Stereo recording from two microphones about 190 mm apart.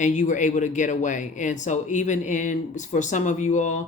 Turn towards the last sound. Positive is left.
turn(degrees=40)  # may be behind; listen again after turning